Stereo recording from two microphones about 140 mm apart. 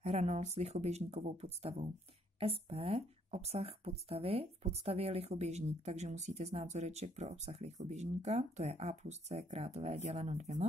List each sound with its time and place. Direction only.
0.0 s speech: 50° right (ahead or behind)